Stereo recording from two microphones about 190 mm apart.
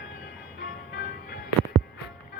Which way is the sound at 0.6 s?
55° left (ahead or behind).